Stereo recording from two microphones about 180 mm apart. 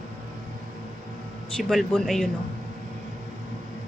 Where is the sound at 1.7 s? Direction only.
Centre (ahead or behind).